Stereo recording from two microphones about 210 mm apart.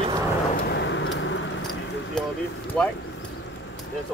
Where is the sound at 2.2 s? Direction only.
5° left (ahead or behind).